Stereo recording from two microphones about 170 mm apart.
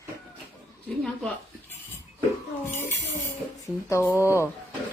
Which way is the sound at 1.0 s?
10° left (ahead or behind).